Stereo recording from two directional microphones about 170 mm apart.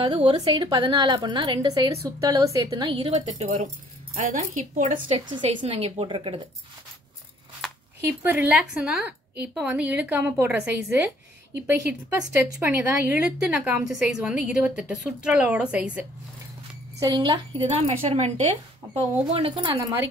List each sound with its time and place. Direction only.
0.0 s a woman's voice: 30° right (ahead or behind)
3.2 s speech: 40° right (ahead or behind)
5.0 s a woman's voice: 30° right (ahead or behind)
8.0 s a woman's voice: 15° right (ahead or behind)
17.0 s a woman's voice: 25° right (ahead or behind)
19.3 s a woman's voice: 30° right (ahead or behind)